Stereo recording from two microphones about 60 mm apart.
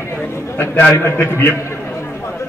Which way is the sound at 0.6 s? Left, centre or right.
Left.